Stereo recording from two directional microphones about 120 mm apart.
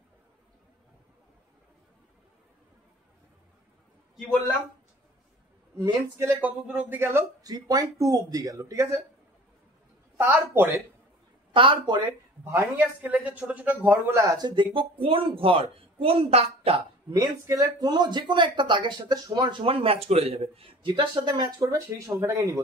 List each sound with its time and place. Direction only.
5.8 s speech: 25° right (ahead or behind)
7.4 s speech: 30° right (ahead or behind)
10.1 s speech: 20° right (ahead or behind)
11.5 s speech: 45° right (ahead or behind)
12.4 s speech: 20° right (ahead or behind)
14.2 s speech: 30° right (ahead or behind)
14.5 s speech: 45° right (ahead or behind)
17.1 s speech: 30° right (ahead or behind)
19.6 s a man's voice: 50° right (ahead or behind)
20.8 s speech: 40° right (ahead or behind)
21.5 s speech: 30° right (ahead or behind)